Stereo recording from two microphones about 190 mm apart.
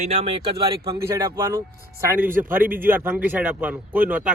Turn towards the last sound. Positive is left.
turn(degrees=-10)  # may be behind; listen again after turning